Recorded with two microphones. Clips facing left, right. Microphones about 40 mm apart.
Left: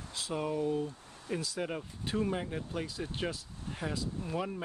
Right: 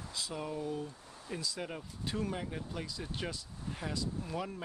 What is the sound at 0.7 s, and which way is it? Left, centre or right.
Speech, left.